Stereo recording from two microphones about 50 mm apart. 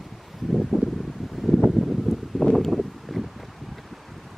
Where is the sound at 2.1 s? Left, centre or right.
Centre.